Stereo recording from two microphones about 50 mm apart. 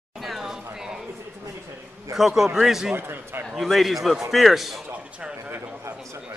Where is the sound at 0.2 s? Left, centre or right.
Centre.